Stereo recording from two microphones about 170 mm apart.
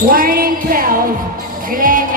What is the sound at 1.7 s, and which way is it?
Music, 55° right (ahead or behind).